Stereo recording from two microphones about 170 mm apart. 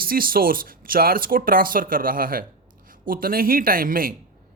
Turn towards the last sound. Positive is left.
turn(degrees=-55)  # may be behind; listen again after turning